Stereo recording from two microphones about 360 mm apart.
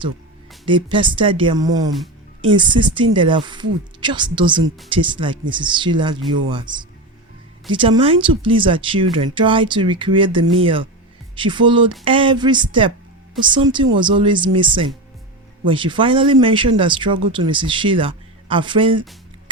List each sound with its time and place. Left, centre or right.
0.6 s speech: centre